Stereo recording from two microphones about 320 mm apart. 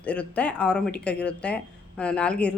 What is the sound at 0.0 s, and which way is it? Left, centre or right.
A woman's voice, centre.